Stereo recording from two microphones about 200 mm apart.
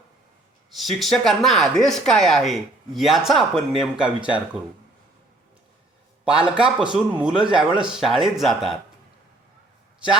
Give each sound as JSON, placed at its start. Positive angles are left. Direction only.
{"t": 0.7, "sound": "speech", "side_deg": 0}
{"t": 6.5, "sound": "speech", "side_deg": -5}